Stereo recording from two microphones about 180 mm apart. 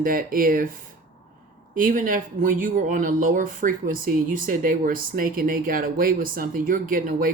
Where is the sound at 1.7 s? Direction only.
50° right (ahead or behind).